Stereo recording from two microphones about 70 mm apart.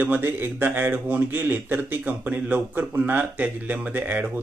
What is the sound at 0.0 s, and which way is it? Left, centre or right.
A man's voice, right.